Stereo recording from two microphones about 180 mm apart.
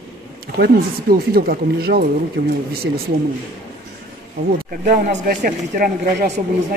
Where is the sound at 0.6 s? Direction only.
55° right (ahead or behind).